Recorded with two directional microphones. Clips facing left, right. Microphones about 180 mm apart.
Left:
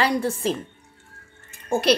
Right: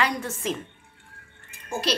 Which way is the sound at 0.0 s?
35° left (ahead or behind).